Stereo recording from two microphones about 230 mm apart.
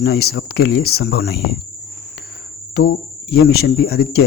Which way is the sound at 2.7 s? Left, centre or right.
Left.